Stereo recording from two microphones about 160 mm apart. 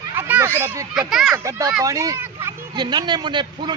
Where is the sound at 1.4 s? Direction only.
20° right (ahead or behind).